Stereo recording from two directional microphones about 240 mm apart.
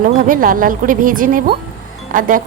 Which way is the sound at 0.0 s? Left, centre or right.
Right.